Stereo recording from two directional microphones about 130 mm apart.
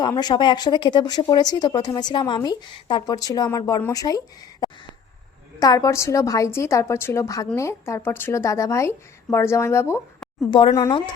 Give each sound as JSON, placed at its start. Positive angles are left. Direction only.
{"t": 0.0, "sound": "a woman's voice", "side_deg": 30}
{"t": 5.5, "sound": "a woman's voice", "side_deg": 30}